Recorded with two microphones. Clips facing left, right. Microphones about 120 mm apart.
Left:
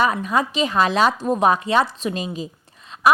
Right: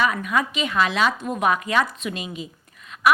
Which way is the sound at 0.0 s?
30° left (ahead or behind).